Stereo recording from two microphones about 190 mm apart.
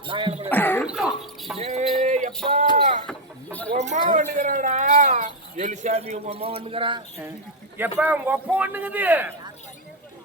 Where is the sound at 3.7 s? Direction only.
35° right (ahead or behind).